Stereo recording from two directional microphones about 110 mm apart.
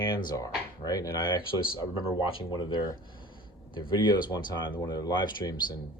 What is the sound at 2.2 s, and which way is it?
Speech, 50° left (ahead or behind).